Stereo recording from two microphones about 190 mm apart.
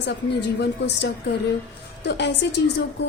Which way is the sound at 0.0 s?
65° left (ahead or behind).